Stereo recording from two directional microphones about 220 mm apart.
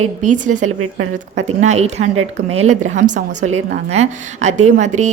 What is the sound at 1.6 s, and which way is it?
A woman's voice, 30° right (ahead or behind).